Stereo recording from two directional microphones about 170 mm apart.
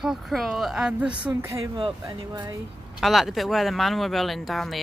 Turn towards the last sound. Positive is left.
turn(degrees=0)  # may be behind; listen again after turning